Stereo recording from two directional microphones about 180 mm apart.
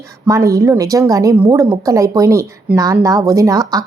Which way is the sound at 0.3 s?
20° right (ahead or behind).